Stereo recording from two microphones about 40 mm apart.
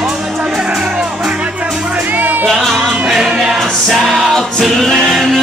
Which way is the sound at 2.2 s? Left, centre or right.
Right.